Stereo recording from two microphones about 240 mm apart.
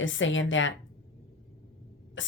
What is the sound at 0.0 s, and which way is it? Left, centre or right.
Speech, left.